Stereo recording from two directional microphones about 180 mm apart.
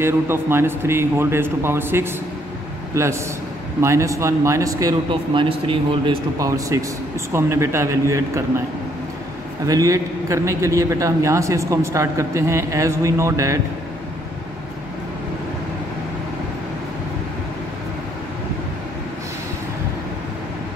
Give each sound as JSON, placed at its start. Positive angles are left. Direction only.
{"t": 0.0, "sound": "a man's voice", "side_deg": -15}
{"t": 6.3, "sound": "a man's voice", "side_deg": -20}
{"t": 9.7, "sound": "a man's voice", "side_deg": -20}